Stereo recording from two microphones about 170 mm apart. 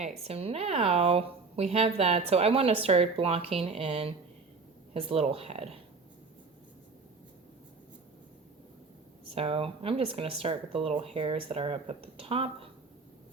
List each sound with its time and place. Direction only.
0.0 s speech: 40° right (ahead or behind)
9.3 s speech: 35° right (ahead or behind)